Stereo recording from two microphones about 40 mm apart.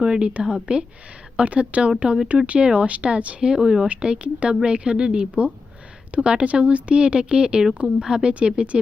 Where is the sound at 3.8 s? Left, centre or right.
Right.